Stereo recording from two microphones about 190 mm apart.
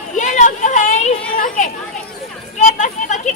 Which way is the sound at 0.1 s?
40° left (ahead or behind).